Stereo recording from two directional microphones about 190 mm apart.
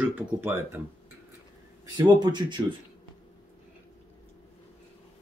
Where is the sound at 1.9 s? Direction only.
20° right (ahead or behind).